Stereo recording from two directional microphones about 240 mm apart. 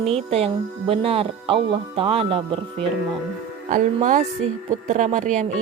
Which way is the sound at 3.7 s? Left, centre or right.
Right.